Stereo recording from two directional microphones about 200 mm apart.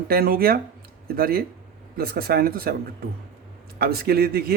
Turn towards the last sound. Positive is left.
turn(degrees=-50)  # may be behind; listen again after turning